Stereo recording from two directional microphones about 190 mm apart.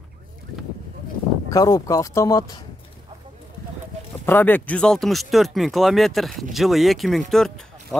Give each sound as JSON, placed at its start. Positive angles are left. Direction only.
{"t": 1.5, "sound": "speech", "side_deg": 20}
{"t": 4.3, "sound": "speech", "side_deg": 10}